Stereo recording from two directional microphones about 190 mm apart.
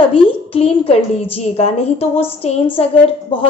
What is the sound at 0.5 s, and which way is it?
A woman's voice, 30° left (ahead or behind).